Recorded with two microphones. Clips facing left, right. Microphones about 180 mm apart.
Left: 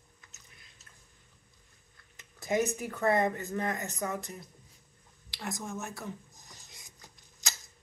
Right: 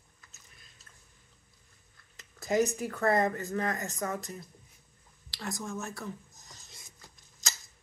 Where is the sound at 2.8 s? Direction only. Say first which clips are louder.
Even; 15° left (ahead or behind).